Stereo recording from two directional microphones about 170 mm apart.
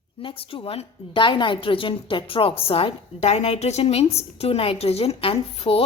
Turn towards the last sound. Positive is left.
turn(degrees=35)  # may be behind; listen again after turning